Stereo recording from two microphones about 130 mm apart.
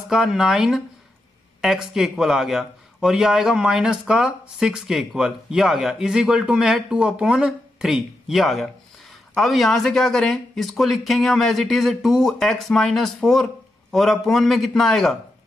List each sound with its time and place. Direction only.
0.1 s a man's voice: 5° right (ahead or behind)